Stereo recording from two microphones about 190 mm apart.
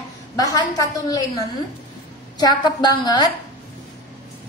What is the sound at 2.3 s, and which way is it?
Speech, 20° left (ahead or behind).